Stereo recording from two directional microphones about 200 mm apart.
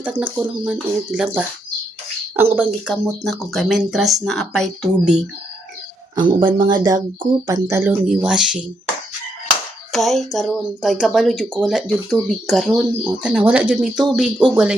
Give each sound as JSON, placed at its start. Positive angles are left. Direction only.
{"t": 0.0, "sound": "speech", "side_deg": -5}
{"t": 2.6, "sound": "speech", "side_deg": -5}
{"t": 6.1, "sound": "speech", "side_deg": -25}
{"t": 9.9, "sound": "speech", "side_deg": 0}